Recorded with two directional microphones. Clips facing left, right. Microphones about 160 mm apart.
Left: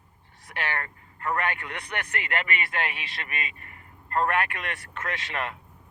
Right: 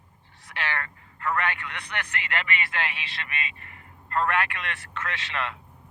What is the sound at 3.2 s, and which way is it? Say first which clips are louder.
A man's voice: even; 45° left (ahead or behind).